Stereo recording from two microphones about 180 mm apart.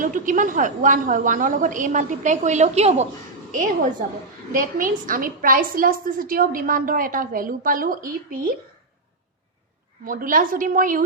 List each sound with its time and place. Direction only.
0.0 s a woman's voice: 45° right (ahead or behind)
4.5 s a woman's voice: 50° right (ahead or behind)
10.1 s a woman's voice: 50° right (ahead or behind)